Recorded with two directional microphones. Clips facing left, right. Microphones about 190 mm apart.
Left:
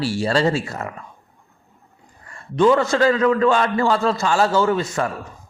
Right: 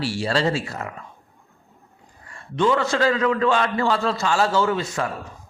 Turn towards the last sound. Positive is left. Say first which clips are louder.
# left 3 dB
turn(degrees=45)  # may be behind; listen again after turning